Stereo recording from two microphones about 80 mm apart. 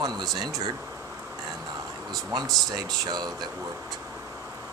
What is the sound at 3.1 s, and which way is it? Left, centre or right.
Speech, right.